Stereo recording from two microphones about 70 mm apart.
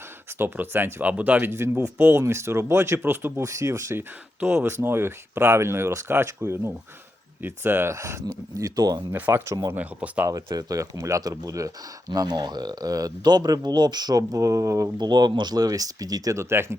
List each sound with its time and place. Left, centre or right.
0.3 s speech: right
1.5 s speech: right
3.4 s speech: right
4.4 s speech: centre
4.6 s speech: right
8.5 s speech: right
9.1 s speech: right
10.2 s speech: right
12.1 s speech: right
14.2 s speech: right
14.9 s speech: right
16.3 s speech: right